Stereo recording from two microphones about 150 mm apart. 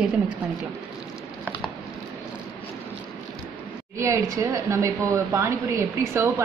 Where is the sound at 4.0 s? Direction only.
20° right (ahead or behind).